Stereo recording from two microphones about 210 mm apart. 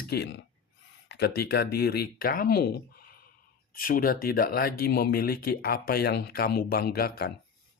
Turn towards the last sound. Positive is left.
turn(degrees=45)  # may be behind; listen again after turning